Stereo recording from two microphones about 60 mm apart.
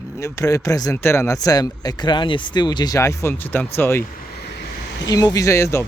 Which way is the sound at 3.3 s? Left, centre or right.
Left.